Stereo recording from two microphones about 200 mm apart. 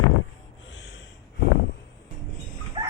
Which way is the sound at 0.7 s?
65° left (ahead or behind).